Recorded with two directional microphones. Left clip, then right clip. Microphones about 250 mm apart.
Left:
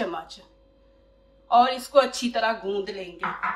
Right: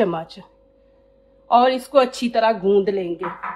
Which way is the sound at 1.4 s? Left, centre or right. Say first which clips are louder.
Right 4 dB; right.